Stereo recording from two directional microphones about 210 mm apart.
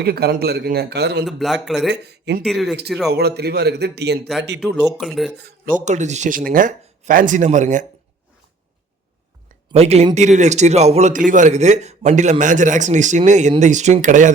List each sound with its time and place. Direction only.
0.0 s speech: 50° right (ahead or behind)
1.2 s a man's voice: centre (ahead or behind)
1.9 s speech: 55° right (ahead or behind)
2.4 s a man's voice: centre (ahead or behind)
3.1 s speech: 50° right (ahead or behind)
4.9 s a man's voice: centre (ahead or behind)
5.4 s speech: 45° right (ahead or behind)
9.7 s speech: 30° right (ahead or behind)